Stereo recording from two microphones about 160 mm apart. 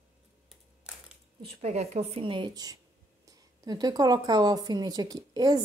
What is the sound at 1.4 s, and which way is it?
A woman's voice, 40° right (ahead or behind).